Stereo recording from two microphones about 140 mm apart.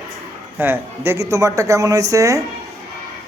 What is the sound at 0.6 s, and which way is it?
Speech, 15° right (ahead or behind).